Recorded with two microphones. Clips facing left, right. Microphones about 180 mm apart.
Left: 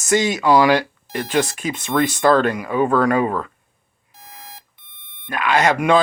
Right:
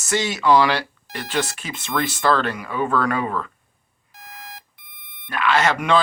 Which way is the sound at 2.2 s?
45° left (ahead or behind).